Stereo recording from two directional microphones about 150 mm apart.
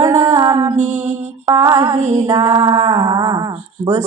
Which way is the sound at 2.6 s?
35° right (ahead or behind).